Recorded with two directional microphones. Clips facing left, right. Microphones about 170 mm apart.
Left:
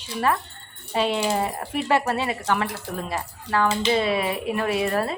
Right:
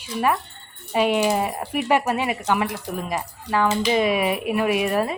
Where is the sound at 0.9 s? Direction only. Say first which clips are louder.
Right 3 dB; 15° right (ahead or behind).